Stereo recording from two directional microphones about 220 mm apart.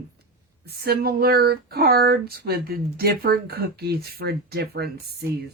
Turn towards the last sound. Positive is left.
turn(degrees=-45)  # may be behind; listen again after turning